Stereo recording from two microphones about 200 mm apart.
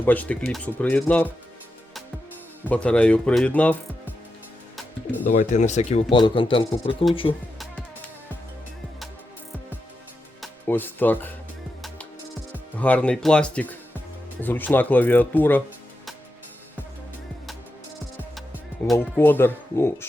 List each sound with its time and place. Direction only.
0.0 s speech: 10° left (ahead or behind)
2.6 s speech: 5° left (ahead or behind)
4.8 s music: 10° left (ahead or behind)
5.3 s speech: 35° left (ahead or behind)
10.7 s speech: 10° left (ahead or behind)
12.7 s speech: 5° left (ahead or behind)
18.9 s speech: 10° left (ahead or behind)